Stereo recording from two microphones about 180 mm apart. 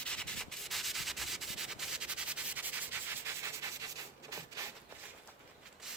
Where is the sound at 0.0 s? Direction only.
5° left (ahead or behind); by 3.8 s 15° right (ahead or behind).